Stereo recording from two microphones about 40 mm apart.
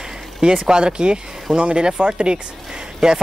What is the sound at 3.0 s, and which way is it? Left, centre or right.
Speech, centre.